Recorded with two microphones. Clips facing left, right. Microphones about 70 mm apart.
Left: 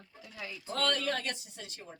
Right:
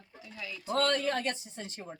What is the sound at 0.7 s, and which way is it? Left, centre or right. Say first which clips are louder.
Speech: right 4 dB; right.